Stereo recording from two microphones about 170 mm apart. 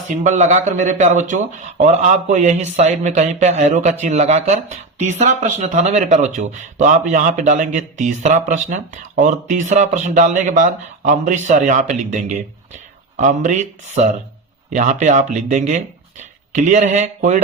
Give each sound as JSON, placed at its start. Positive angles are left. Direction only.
{"t": 0.2, "sound": "speech", "side_deg": -45}